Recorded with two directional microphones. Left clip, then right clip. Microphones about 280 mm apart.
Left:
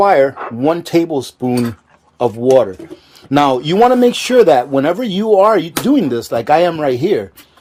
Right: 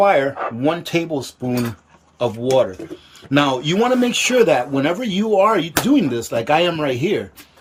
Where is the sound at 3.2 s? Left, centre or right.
Centre.